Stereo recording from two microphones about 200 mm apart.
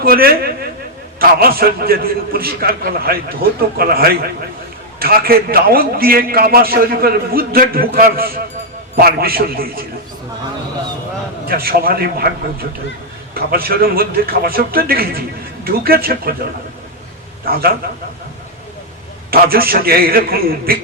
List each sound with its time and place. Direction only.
0.0 s a man's voice: 50° right (ahead or behind)
11.4 s a man's voice: 50° right (ahead or behind)
17.4 s a man's voice: 50° right (ahead or behind)
19.3 s a man's voice: 50° right (ahead or behind)